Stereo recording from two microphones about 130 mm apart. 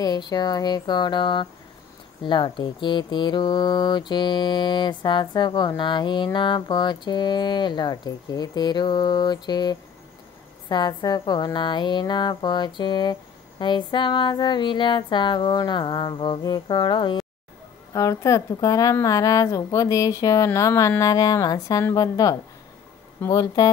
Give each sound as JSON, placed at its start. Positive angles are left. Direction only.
{"t": 0.0, "sound": "speech", "side_deg": 30}
{"t": 17.9, "sound": "a woman's voice", "side_deg": 25}